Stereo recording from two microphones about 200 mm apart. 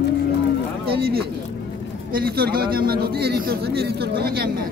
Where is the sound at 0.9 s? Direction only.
50° right (ahead or behind).